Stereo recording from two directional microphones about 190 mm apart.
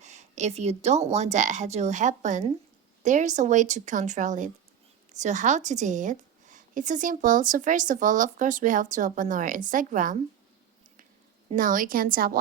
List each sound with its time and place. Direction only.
0.0 s a woman's voice: 40° right (ahead or behind)
11.5 s a woman's voice: 45° right (ahead or behind)